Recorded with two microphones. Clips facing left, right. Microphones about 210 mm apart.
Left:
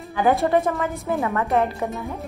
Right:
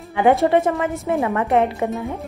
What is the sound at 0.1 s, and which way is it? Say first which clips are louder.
A woman's voice: right 3 dB; 25° right (ahead or behind).